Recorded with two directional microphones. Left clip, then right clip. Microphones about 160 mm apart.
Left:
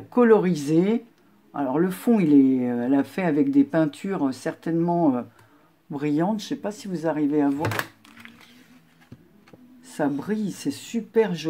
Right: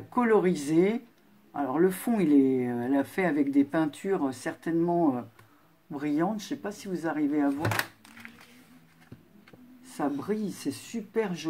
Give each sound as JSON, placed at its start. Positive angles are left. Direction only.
{"t": 0.1, "sound": "speech", "side_deg": 30}
{"t": 8.2, "sound": "a sound", "side_deg": 0}
{"t": 9.9, "sound": "speech", "side_deg": 30}